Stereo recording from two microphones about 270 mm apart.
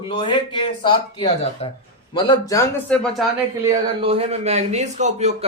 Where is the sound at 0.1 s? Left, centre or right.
Centre.